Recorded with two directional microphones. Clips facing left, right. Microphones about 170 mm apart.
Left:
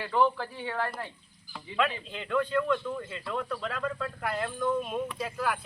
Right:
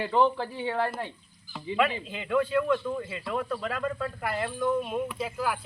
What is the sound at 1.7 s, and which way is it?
Speech, 10° right (ahead or behind).